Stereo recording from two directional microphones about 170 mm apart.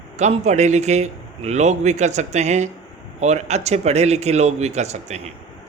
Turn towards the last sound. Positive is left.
turn(degrees=-40)  # may be behind; listen again after turning